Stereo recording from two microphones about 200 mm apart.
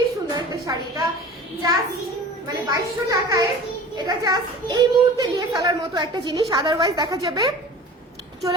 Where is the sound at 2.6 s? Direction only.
15° right (ahead or behind).